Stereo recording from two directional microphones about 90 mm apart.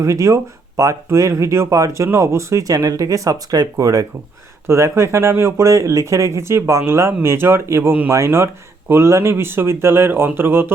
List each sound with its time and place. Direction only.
0.0 s speech: 40° right (ahead or behind)